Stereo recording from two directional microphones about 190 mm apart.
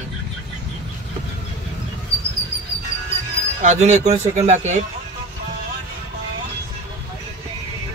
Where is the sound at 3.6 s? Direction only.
40° right (ahead or behind).